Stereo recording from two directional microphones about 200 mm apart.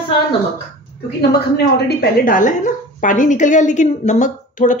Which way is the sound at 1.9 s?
40° left (ahead or behind).